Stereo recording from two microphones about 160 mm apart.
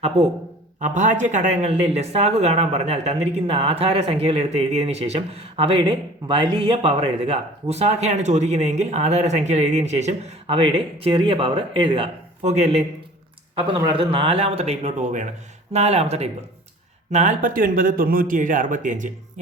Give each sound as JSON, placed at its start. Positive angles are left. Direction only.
{"t": 0.8, "sound": "speech", "side_deg": -50}
{"t": 13.6, "sound": "speech", "side_deg": -30}